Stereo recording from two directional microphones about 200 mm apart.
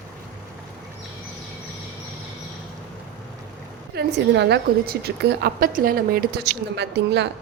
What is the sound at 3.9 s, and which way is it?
A woman's voice, 55° right (ahead or behind).